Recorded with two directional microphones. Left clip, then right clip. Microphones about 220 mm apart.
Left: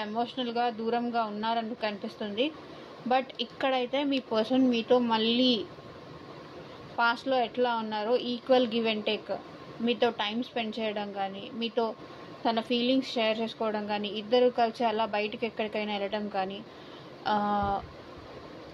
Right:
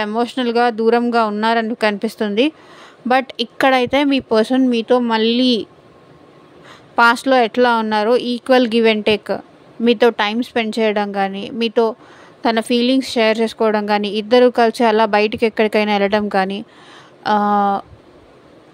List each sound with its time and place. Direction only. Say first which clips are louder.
0.0 s speech: right 13 dB; 65° right (ahead or behind)
7.0 s speech: right 14 dB; 65° right (ahead or behind)